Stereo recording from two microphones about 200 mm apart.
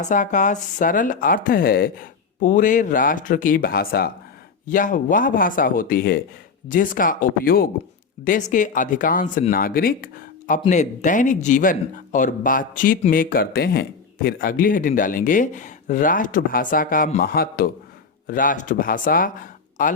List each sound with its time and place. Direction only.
0.0 s speech: 40° left (ahead or behind)